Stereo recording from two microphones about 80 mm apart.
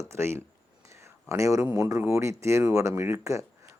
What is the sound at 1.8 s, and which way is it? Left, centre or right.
Speech, right.